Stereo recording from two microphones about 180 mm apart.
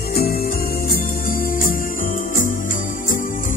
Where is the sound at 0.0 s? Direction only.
55° left (ahead or behind).